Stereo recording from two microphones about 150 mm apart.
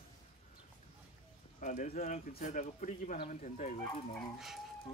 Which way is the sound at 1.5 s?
55° left (ahead or behind).